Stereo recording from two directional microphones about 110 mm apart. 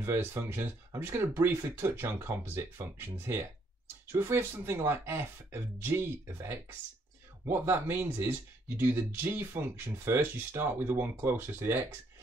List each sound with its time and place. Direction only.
0.0 s speech: 25° right (ahead or behind)